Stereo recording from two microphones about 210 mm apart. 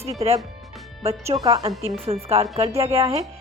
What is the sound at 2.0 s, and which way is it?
A woman's voice, 30° right (ahead or behind).